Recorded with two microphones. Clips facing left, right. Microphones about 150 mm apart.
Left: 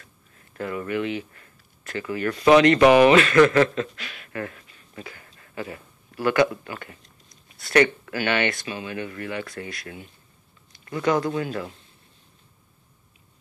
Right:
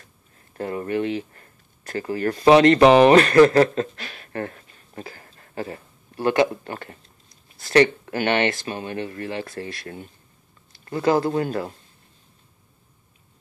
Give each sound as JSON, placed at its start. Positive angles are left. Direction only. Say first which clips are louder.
{"t": 0.5, "sound": "speech", "louder": "right 2 dB", "side_deg": -35}
{"t": 3.1, "sound": "speech", "louder": "right 3 dB", "side_deg": -40}
{"t": 8.6, "sound": "speech", "louder": "right 2 dB", "side_deg": -45}
{"t": 8.9, "sound": "speech", "louder": "right 1 dB", "side_deg": -30}